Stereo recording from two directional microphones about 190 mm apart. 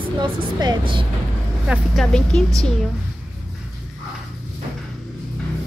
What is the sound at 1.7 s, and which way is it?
Speech, centre (ahead or behind).